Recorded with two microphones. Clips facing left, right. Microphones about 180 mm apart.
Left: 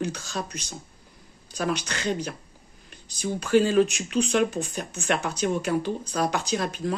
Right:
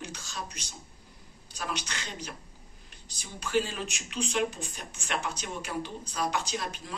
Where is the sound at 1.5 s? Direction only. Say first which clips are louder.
Left 9 dB; 55° left (ahead or behind).